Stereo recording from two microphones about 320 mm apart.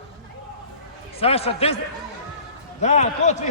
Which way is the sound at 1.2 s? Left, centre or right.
Centre.